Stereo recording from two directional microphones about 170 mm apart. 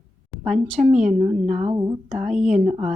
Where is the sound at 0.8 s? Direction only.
45° right (ahead or behind).